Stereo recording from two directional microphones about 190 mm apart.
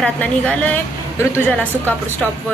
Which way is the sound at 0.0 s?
5° left (ahead or behind).